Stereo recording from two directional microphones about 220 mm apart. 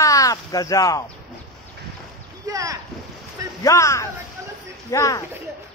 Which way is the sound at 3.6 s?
15° left (ahead or behind).